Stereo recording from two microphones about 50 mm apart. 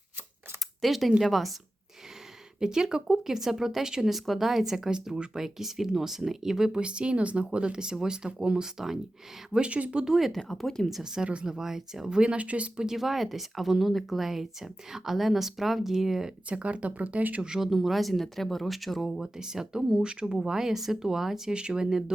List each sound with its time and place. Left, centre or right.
0.8 s speech: centre
2.6 s speech: centre
6.7 s speech: centre
10.0 s speech: centre
10.5 s speech: centre
10.8 s speech: centre; by 12.8 s right
12.8 s speech: centre
16.5 s speech: right
17.4 s speech: centre
19.2 s speech: centre